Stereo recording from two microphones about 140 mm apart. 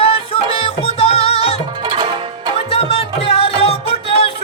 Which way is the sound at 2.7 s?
45° left (ahead or behind).